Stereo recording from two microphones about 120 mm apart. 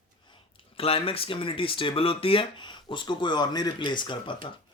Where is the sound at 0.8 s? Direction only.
55° left (ahead or behind).